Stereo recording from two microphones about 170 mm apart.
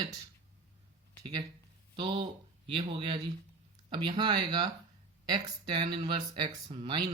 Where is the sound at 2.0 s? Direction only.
30° right (ahead or behind).